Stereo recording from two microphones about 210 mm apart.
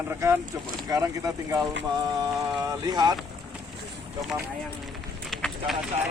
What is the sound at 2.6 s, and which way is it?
Speech, 20° right (ahead or behind).